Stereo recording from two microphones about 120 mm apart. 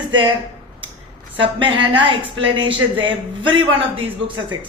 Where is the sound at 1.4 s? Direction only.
45° right (ahead or behind).